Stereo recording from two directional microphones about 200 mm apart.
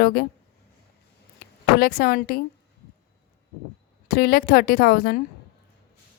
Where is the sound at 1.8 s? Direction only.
50° left (ahead or behind).